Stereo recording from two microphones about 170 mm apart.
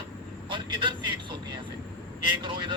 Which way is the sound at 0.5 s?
30° right (ahead or behind).